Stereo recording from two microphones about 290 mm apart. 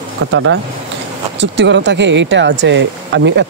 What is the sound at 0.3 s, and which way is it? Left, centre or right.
Speech, right.